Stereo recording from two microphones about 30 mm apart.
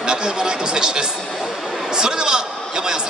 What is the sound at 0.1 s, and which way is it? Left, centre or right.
Speech, right.